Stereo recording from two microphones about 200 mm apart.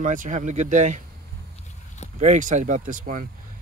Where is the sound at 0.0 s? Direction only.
40° right (ahead or behind).